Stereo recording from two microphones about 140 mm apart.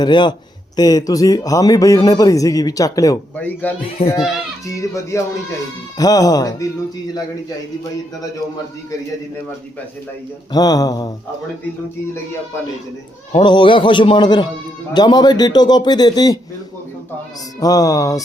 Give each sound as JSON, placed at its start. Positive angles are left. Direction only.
{"t": 0.0, "sound": "a man's voice", "side_deg": 30}
{"t": 3.3, "sound": "speech", "side_deg": 10}
{"t": 4.0, "sound": "a child's voice", "side_deg": 45}
{"t": 4.6, "sound": "speech", "side_deg": 20}
{"t": 10.5, "sound": "speech", "side_deg": 25}
{"t": 13.3, "sound": "a man's voice", "side_deg": 35}
{"t": 17.6, "sound": "speech", "side_deg": 25}